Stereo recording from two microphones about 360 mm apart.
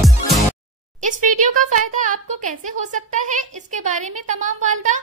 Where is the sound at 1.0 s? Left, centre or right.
Right.